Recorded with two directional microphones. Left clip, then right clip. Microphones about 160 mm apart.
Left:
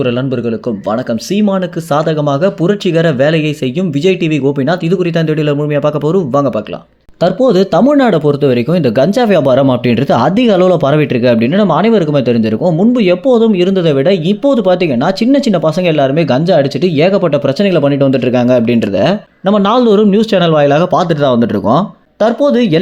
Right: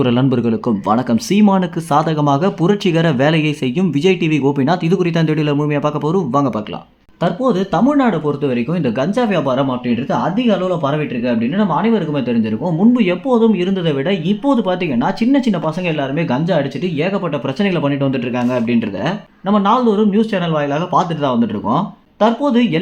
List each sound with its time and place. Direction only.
0.9 s speech: centre (ahead or behind); by 6.5 s 15° left (ahead or behind)
7.2 s speech: 35° left (ahead or behind)